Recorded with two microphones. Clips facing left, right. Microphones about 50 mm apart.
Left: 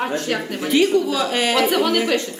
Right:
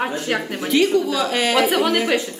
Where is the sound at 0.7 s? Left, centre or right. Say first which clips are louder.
Even; centre.